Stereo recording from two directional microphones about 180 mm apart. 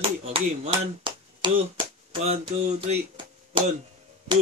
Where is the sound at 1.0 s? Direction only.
25° right (ahead or behind).